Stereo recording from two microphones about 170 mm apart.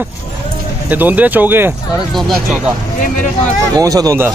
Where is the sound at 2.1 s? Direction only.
Centre (ahead or behind).